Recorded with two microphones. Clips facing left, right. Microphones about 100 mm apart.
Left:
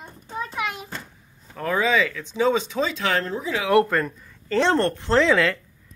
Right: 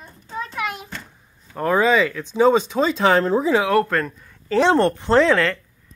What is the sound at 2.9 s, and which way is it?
Speech, 35° right (ahead or behind).